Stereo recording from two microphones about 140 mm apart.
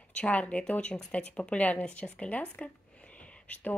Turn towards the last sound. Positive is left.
turn(degrees=10)  # may be behind; listen again after turning